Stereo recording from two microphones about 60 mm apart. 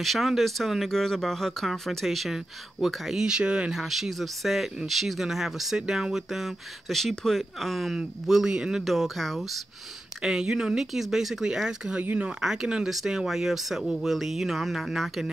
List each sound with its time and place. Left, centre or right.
0.0 s speech: centre
3.7 s speech: centre
10.2 s speech: centre
12.0 s speech: right
12.4 s speech: centre